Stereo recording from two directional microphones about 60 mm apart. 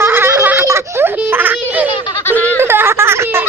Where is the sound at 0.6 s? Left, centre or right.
Right.